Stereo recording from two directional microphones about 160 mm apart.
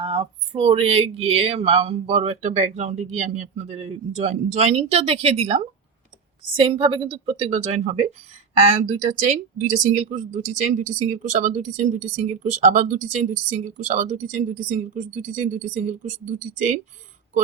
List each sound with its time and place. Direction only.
0.0 s speech: 35° right (ahead or behind); by 16.7 s 50° right (ahead or behind)